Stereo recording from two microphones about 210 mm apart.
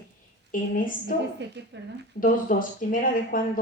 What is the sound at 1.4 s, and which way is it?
Speech, 55° right (ahead or behind).